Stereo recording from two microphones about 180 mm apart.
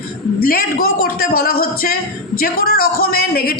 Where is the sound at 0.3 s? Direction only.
55° left (ahead or behind).